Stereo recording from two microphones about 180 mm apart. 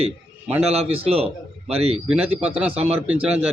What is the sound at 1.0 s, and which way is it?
Speech, 35° right (ahead or behind).